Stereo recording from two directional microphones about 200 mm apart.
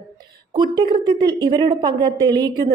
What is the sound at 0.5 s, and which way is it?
A woman's voice, 20° right (ahead or behind).